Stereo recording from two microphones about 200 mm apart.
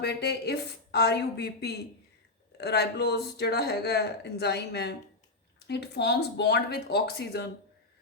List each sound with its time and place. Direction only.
0.0 s speech: 55° left (ahead or behind)